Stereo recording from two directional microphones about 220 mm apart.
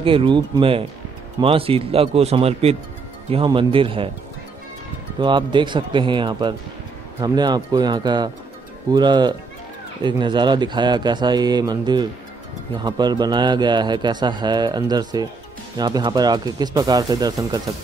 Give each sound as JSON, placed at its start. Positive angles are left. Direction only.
{"t": 0.0, "sound": "a man's voice", "side_deg": -25}
{"t": 5.2, "sound": "a man's voice", "side_deg": -20}